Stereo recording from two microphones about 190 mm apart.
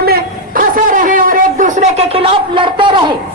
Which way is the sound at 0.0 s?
50° right (ahead or behind).